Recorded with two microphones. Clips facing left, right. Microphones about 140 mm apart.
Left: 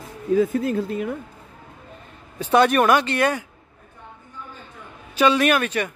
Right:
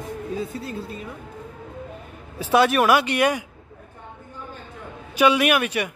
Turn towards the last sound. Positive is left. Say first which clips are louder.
# left 1 dB
turn(degrees=-15)  # may be behind; listen again after turning